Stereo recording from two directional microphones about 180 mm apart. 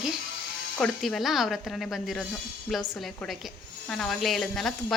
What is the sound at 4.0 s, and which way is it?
Speech, centre (ahead or behind).